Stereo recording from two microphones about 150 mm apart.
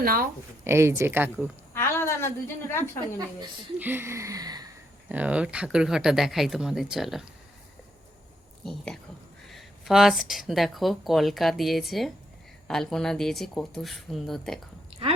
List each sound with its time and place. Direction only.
0.0 s speech: 75° right (ahead or behind)
0.6 s speech: 15° right (ahead or behind)
1.7 s a woman's voice: 15° left (ahead or behind)
3.8 s a sound: 15° right (ahead or behind)
5.0 s speech: 10° right (ahead or behind)
8.6 s speech: 5° left (ahead or behind)
15.0 s chewing: 40° right (ahead or behind)